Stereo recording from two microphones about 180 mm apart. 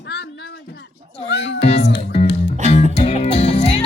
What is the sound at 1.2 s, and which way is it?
Music, 80° left.